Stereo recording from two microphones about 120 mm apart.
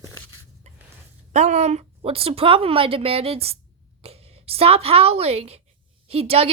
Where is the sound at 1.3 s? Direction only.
75° right (ahead or behind).